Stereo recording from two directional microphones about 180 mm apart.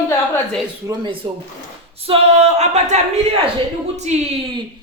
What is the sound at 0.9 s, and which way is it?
Speech, 25° right (ahead or behind).